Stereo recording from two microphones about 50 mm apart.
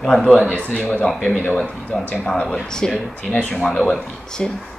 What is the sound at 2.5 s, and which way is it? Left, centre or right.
Speech, centre.